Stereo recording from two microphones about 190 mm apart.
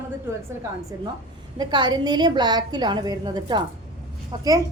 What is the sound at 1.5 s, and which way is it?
A woman's voice, 20° right (ahead or behind).